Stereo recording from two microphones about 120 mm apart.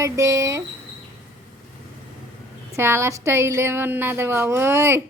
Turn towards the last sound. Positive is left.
turn(degrees=-20)  # may be behind; listen again after turning